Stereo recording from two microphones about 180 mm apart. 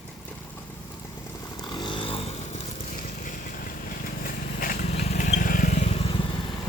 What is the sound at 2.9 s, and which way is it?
Vehicle, 50° left (ahead or behind).